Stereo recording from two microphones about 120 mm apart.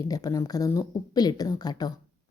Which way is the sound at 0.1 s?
30° left (ahead or behind).